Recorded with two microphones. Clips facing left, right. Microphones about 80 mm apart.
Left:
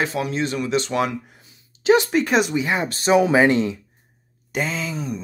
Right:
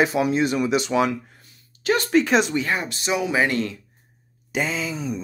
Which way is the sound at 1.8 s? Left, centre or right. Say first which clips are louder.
Left 6 dB; centre.